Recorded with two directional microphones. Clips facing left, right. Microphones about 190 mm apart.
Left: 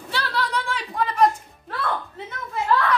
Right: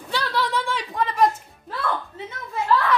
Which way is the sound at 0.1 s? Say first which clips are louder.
Right 2 dB; centre (ahead or behind).